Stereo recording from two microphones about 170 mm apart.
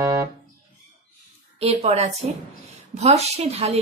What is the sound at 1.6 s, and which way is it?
Speech, 35° right (ahead or behind).